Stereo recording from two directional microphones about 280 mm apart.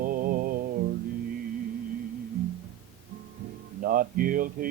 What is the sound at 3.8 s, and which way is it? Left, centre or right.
Speech, right.